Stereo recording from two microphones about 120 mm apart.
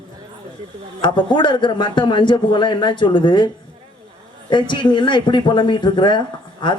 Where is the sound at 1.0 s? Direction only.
40° left (ahead or behind).